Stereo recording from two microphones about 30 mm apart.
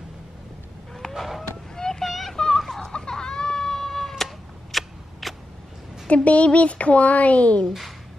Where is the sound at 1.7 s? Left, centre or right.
Centre.